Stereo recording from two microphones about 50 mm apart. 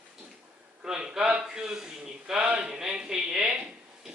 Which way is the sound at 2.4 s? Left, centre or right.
Right.